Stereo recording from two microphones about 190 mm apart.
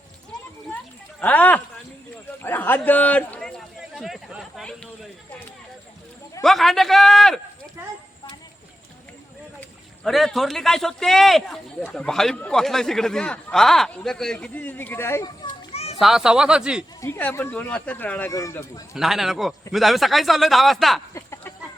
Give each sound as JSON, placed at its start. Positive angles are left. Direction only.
{"t": 1.2, "sound": "speech", "side_deg": 10}
{"t": 3.8, "sound": "a sound", "side_deg": 0}
{"t": 6.4, "sound": "a man's voice", "side_deg": 0}
{"t": 7.8, "sound": "speech", "side_deg": -15}
{"t": 9.6, "sound": "a man's voice", "side_deg": 0}
{"t": 15.7, "sound": "children playing", "side_deg": 35}
{"t": 16.0, "sound": "a man's voice", "side_deg": 0}
{"t": 17.0, "sound": "speech", "side_deg": 10}
{"t": 18.9, "sound": "a man's voice", "side_deg": 0}
{"t": 21.1, "sound": "chicken", "side_deg": 15}